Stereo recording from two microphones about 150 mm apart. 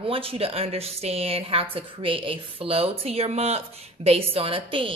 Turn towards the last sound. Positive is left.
turn(degrees=-35)  # may be behind; listen again after turning